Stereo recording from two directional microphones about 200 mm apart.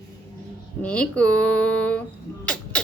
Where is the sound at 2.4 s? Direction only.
5° left (ahead or behind).